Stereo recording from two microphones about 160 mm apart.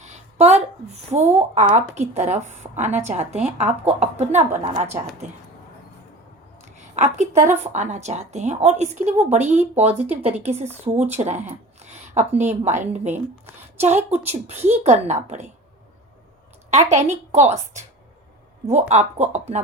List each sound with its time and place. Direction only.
0.0 s a woman's voice: 45° right (ahead or behind)
6.7 s a sound: 45° right (ahead or behind)
7.6 s a woman's voice: 45° right (ahead or behind)
11.8 s a sound: 45° right (ahead or behind)
12.3 s a woman's voice: 10° right (ahead or behind)
14.1 s a woman's voice: 40° right (ahead or behind)
16.6 s a woman's voice: 45° right (ahead or behind)